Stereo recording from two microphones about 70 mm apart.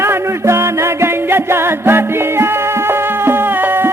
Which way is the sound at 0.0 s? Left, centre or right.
Right.